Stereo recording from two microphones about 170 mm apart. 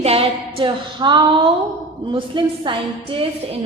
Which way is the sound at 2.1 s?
30° right (ahead or behind).